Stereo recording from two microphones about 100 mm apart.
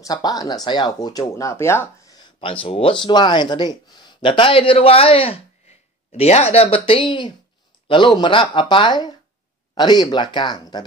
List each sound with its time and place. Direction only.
0.0 s speech: 40° left (ahead or behind)
1.3 s speech: 30° left (ahead or behind)
2.0 s a sound: 45° left (ahead or behind)
2.4 s speech: 65° left (ahead or behind); by 10.8 s 45° left (ahead or behind)